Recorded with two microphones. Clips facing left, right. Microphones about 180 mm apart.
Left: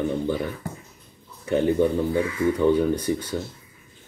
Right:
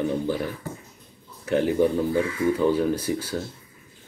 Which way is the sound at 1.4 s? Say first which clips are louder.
Left 1 dB; 5° right (ahead or behind).